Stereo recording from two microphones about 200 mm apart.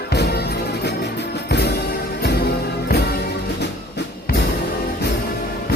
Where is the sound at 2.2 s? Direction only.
50° left (ahead or behind).